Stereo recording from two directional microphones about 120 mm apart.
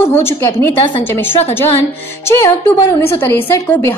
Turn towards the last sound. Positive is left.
turn(degrees=20)  # may be behind; listen again after turning